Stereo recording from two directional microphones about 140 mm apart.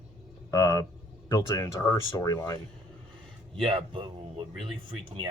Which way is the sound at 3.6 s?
40° right (ahead or behind).